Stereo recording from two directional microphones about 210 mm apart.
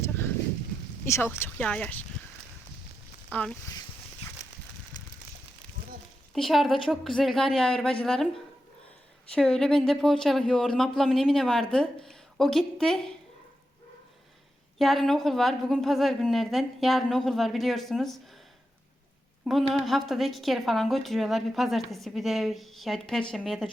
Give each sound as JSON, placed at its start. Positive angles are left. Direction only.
{"t": 1.0, "sound": "speech", "side_deg": 10}
{"t": 3.3, "sound": "speech", "side_deg": 5}
{"t": 4.9, "sound": "a sound", "side_deg": 20}
{"t": 6.3, "sound": "speech", "side_deg": 0}
{"t": 9.3, "sound": "speech", "side_deg": 5}
{"t": 14.8, "sound": "speech", "side_deg": 0}
{"t": 19.5, "sound": "speech", "side_deg": 0}